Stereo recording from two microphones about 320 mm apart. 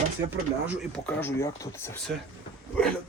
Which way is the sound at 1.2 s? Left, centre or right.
Centre.